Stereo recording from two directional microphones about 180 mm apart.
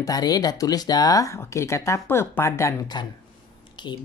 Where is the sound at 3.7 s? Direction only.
25° left (ahead or behind).